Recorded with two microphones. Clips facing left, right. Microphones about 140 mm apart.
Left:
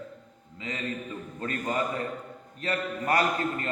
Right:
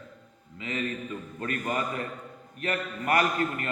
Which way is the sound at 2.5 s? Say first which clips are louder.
Left 1 dB; 30° left (ahead or behind).